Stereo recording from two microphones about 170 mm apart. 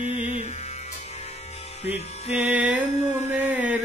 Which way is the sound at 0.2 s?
45° right (ahead or behind).